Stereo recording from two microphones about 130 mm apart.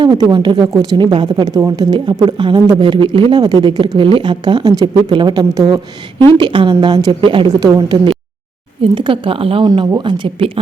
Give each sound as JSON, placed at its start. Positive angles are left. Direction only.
{"t": 0.0, "sound": "a woman's voice", "side_deg": -35}
{"t": 9.6, "sound": "speech", "side_deg": -35}